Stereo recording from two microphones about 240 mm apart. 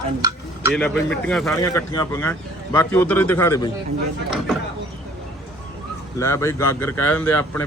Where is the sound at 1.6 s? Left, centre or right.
Centre.